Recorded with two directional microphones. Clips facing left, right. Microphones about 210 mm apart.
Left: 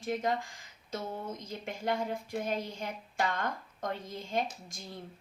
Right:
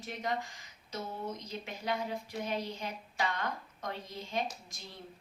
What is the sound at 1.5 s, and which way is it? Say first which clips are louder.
A woman's voice: left 5 dB; 50° left (ahead or behind).